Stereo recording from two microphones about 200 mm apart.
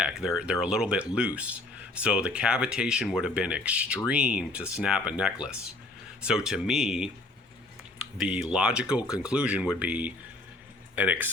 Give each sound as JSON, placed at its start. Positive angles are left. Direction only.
{"t": 0.0, "sound": "speech", "side_deg": -5}
{"t": 8.2, "sound": "speech", "side_deg": -5}